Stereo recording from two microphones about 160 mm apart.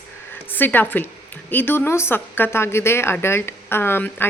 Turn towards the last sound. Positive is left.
turn(degrees=15)  # may be behind; listen again after turning